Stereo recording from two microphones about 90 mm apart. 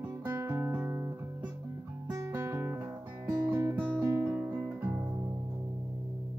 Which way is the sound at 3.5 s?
30° right (ahead or behind).